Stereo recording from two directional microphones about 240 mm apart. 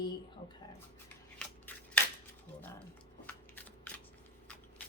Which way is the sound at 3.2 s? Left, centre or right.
Centre.